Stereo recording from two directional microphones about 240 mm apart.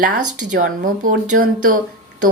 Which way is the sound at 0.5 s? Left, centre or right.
Right.